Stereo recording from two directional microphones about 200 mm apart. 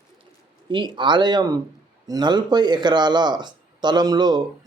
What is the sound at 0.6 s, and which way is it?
Speech, 25° right (ahead or behind).